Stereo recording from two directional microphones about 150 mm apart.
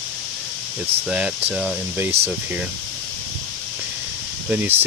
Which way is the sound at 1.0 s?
5° right (ahead or behind).